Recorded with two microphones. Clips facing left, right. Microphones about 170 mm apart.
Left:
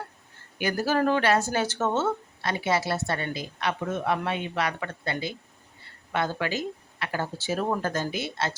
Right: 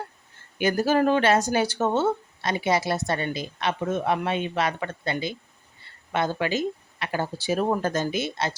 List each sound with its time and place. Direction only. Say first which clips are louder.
0.6 s speech: right 3 dB; 20° right (ahead or behind)
6.1 s speech: right 3 dB; 20° right (ahead or behind)